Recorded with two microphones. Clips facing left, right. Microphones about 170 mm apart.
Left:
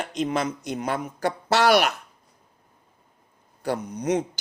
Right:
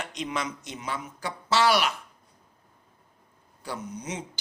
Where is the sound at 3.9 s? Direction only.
60° left (ahead or behind).